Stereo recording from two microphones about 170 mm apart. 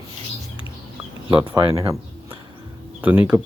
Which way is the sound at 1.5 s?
20° right (ahead or behind).